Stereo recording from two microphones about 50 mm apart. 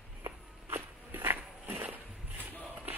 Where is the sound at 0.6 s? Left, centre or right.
Right.